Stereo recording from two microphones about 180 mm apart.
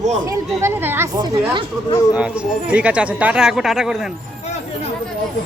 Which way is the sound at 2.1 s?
5° right (ahead or behind).